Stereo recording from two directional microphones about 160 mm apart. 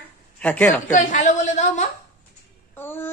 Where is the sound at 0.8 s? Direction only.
50° left (ahead or behind).